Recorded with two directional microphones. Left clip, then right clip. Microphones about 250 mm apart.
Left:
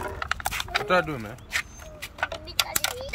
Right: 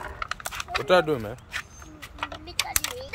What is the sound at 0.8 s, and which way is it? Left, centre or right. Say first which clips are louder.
Speech: right 5 dB; right.